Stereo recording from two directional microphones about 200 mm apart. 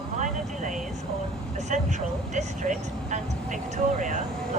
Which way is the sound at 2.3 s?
35° right (ahead or behind).